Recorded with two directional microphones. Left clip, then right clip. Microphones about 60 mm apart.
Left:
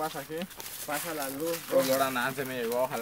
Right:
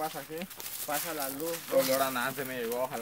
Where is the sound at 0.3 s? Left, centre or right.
Centre.